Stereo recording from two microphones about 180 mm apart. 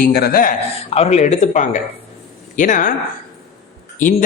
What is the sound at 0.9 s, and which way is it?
A man's voice, 35° left (ahead or behind).